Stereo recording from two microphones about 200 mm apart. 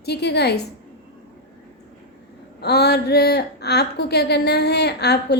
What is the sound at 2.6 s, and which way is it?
A woman's voice, 55° left (ahead or behind).